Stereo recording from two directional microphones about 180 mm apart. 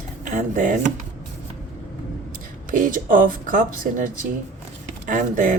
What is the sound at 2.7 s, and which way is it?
Speech, 50° right (ahead or behind).